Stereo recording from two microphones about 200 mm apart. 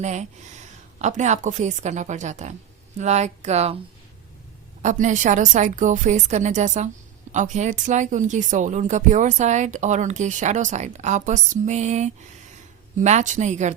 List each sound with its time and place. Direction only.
0.0 s speech: 35° right (ahead or behind)
4.8 s speech: 40° right (ahead or behind)